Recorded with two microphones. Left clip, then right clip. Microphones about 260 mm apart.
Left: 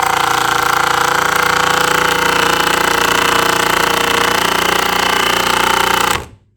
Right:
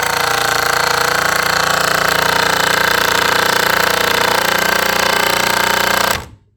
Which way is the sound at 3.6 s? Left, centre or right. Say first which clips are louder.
Even; right.